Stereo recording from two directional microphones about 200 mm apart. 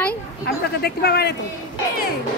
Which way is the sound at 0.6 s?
55° left (ahead or behind).